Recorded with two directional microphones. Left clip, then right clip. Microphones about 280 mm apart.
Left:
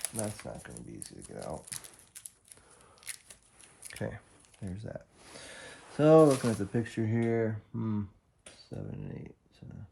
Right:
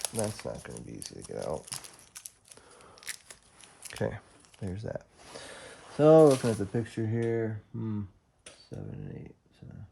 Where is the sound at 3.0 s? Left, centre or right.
Centre.